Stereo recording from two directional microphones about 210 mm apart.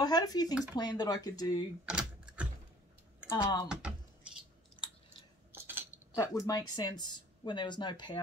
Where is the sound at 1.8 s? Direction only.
5° right (ahead or behind).